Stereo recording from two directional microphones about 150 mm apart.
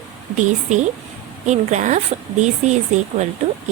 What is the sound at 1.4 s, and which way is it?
Speech, 50° right (ahead or behind).